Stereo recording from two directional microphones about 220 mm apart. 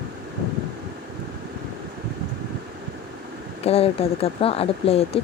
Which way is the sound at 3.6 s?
25° left (ahead or behind).